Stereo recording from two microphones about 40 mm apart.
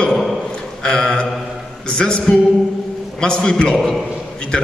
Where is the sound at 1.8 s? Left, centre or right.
Left.